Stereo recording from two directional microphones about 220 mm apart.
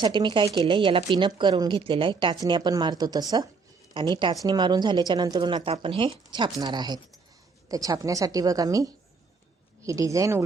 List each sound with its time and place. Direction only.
0.0 s a woman's voice: 20° right (ahead or behind)